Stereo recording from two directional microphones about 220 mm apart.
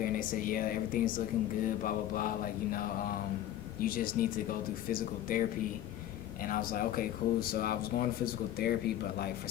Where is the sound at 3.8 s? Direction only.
40° left (ahead or behind).